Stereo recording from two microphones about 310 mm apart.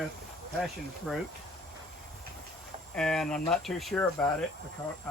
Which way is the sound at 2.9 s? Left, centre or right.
Centre.